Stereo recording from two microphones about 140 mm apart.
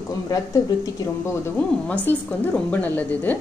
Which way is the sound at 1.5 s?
10° left (ahead or behind).